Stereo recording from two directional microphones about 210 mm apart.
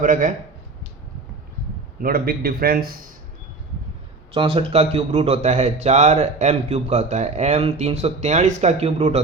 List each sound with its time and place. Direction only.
0.0 s speech: 40° right (ahead or behind)
2.0 s a man's voice: 45° right (ahead or behind)
4.4 s speech: 25° right (ahead or behind)